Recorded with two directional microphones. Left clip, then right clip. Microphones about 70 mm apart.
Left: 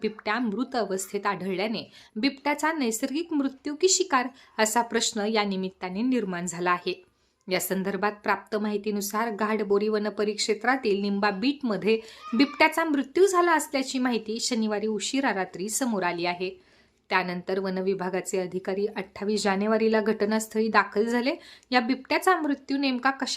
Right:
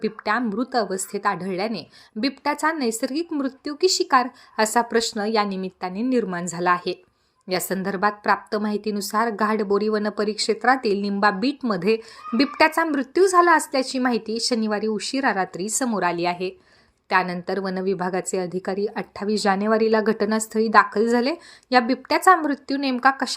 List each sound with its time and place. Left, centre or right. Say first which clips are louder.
0.0 s a woman's voice: right 5 dB; right